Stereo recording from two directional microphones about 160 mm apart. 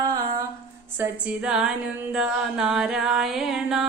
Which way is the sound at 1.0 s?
5° right (ahead or behind).